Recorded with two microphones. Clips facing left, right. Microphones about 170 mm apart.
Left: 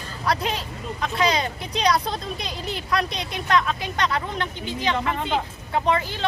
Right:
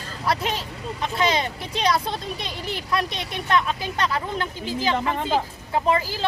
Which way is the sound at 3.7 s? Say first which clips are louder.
Even; 30° right (ahead or behind).